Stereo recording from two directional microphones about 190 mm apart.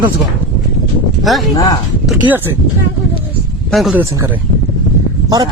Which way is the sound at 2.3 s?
10° right (ahead or behind).